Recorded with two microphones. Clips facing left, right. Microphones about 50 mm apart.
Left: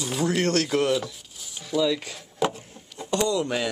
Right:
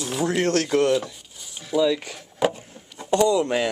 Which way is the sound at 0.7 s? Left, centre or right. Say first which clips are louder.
Right 3 dB; centre.